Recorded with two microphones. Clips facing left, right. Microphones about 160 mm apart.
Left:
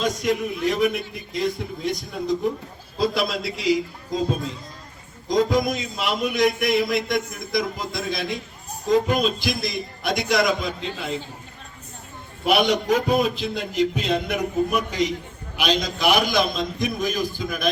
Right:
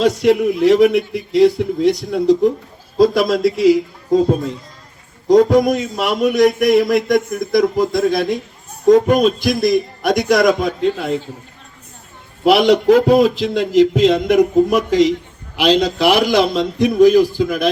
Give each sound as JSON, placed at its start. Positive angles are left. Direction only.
{"t": 0.0, "sound": "a man's voice", "side_deg": -75}
{"t": 3.0, "sound": "speech", "side_deg": -45}
{"t": 5.3, "sound": "a man's voice", "side_deg": -65}
{"t": 6.3, "sound": "speech", "side_deg": -45}
{"t": 6.7, "sound": "speech", "side_deg": -65}
{"t": 7.1, "sound": "speech", "side_deg": -45}
{"t": 8.1, "sound": "speech", "side_deg": -60}
{"t": 12.5, "sound": "a man's voice", "side_deg": -80}